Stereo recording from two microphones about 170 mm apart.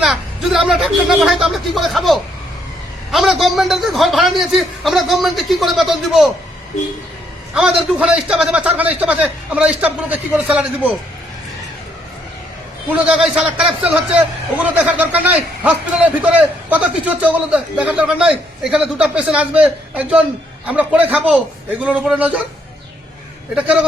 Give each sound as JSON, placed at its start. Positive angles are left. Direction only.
{"t": 0.0, "sound": "a man's voice", "side_deg": 0}
{"t": 7.5, "sound": "a man's voice", "side_deg": -5}
{"t": 12.9, "sound": "a man's voice", "side_deg": -5}